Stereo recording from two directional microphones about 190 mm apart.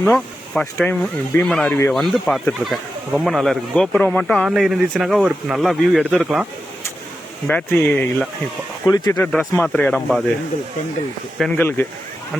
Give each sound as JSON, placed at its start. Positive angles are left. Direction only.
{"t": 0.0, "sound": "speech", "side_deg": 5}
{"t": 8.9, "sound": "speech", "side_deg": 20}
{"t": 9.3, "sound": "speech", "side_deg": 0}
{"t": 11.3, "sound": "speech", "side_deg": 5}